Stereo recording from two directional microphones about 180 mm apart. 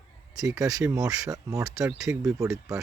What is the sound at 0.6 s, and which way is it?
Speech, 20° right (ahead or behind).